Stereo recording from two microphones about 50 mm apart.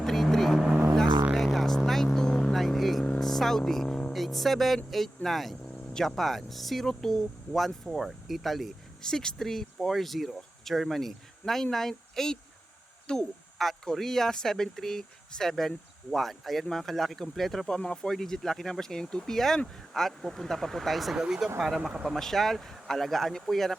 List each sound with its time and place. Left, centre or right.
0.0 s vehicle: centre
2.5 s vehicle: centre
3.2 s a sound: centre
3.8 s a sound: centre
4.1 s music: centre
4.9 s speech: centre
9.0 s speech: centre
13.6 s speech: centre
21.2 s speech: centre
22.1 s speech: centre